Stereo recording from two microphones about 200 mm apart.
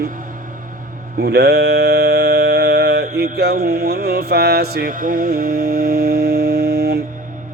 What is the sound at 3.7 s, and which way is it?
Mantra, 50° right (ahead or behind).